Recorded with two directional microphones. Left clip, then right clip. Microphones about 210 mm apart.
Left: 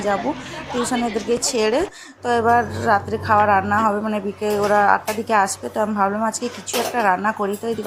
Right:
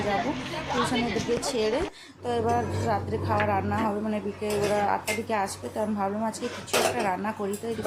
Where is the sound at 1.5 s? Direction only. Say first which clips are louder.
Left 7 dB; 20° left (ahead or behind).